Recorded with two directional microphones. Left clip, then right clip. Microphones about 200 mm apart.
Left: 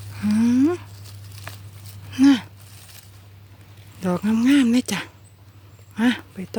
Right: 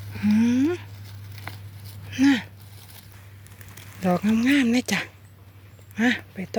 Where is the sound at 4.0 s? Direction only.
15° left (ahead or behind).